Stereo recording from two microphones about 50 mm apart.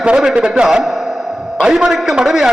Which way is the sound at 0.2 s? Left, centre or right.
Centre.